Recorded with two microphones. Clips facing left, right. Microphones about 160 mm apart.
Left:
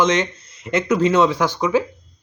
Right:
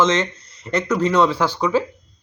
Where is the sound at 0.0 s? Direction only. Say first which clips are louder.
Even; 15° left (ahead or behind).